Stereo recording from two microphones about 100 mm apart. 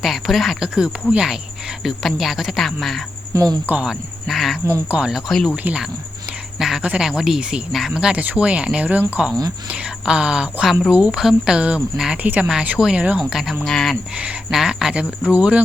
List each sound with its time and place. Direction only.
0.0 s speech: centre (ahead or behind)
3.3 s speech: 40° right (ahead or behind)
3.8 s speech: centre (ahead or behind)
6.6 s speech: 5° right (ahead or behind)
14.2 s speech: 10° right (ahead or behind)